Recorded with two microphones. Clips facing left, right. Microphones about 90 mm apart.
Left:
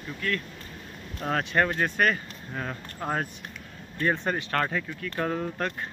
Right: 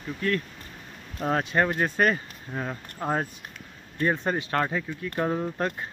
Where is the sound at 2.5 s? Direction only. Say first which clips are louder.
Right 2 dB; 15° right (ahead or behind).